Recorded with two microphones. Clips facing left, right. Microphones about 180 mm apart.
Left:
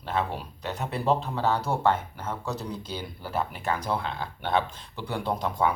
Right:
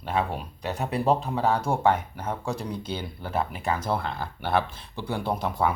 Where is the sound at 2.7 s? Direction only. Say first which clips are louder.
Right 3 dB; 5° left (ahead or behind).